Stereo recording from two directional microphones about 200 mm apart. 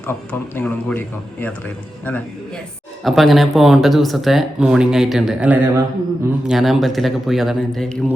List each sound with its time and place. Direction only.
0.1 s a man's voice: 10° left (ahead or behind)